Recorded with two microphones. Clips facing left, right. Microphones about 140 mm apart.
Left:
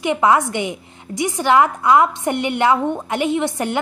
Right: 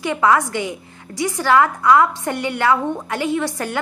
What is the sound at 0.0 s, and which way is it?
A woman's voice, 20° left (ahead or behind).